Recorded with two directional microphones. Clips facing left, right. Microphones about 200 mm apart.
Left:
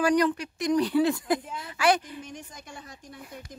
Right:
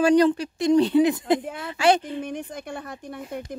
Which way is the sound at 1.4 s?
60° right (ahead or behind).